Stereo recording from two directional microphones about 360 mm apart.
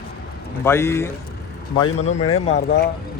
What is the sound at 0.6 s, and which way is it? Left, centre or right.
A man's voice, centre.